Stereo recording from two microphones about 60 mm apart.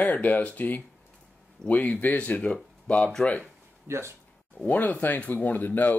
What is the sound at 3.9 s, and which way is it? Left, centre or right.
Speech, right.